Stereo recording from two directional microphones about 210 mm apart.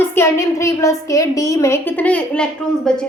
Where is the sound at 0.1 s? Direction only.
10° left (ahead or behind).